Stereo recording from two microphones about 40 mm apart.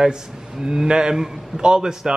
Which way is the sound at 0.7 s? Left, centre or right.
Right.